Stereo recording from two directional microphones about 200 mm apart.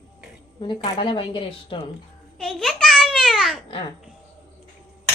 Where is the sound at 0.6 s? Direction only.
25° left (ahead or behind).